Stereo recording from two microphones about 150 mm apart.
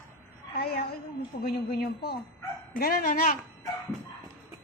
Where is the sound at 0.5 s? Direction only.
90° left.